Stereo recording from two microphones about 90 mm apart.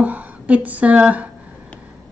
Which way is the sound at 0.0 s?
15° right (ahead or behind).